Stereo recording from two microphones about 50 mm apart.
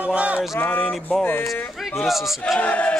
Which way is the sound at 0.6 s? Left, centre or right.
Left.